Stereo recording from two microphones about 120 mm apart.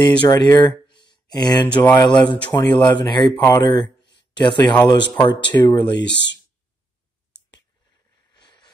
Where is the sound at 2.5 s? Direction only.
35° left (ahead or behind).